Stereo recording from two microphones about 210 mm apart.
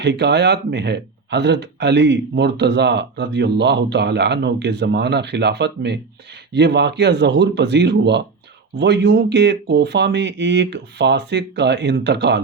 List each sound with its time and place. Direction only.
0.0 s speech: 55° right (ahead or behind)